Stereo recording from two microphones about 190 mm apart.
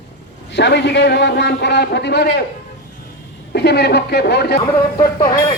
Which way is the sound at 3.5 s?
60° left (ahead or behind).